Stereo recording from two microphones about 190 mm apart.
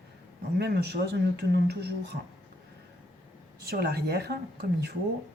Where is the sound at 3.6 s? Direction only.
55° right (ahead or behind).